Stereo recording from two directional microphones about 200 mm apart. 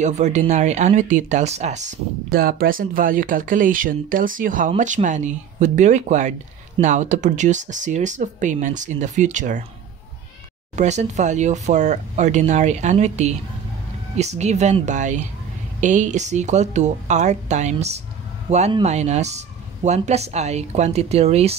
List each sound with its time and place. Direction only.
0.0 s speech: 35° right (ahead or behind)
2.3 s speech: 45° right (ahead or behind)
10.8 s speech: 35° right (ahead or behind)